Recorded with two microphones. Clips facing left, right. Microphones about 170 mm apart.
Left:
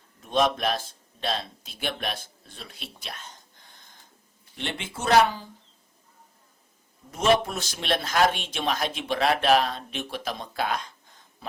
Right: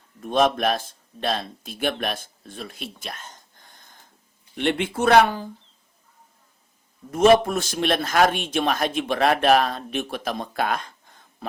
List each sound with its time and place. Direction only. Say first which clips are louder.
0.2 s speech: right 4 dB; 50° right (ahead or behind)
4.5 s speech: right 11 dB; 60° right (ahead or behind)
7.1 s speech: right 6 dB; 50° right (ahead or behind)